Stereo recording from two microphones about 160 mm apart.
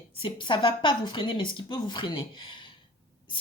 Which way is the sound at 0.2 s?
30° left (ahead or behind).